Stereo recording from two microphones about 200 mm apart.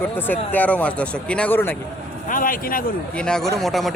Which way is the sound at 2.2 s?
45° left (ahead or behind).